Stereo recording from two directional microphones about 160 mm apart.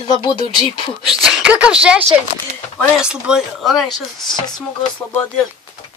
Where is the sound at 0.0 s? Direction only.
30° left (ahead or behind).